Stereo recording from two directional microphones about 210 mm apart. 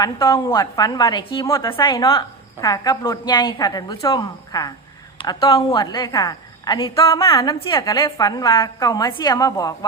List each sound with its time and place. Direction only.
0.0 s a woman's voice: 20° left (ahead or behind)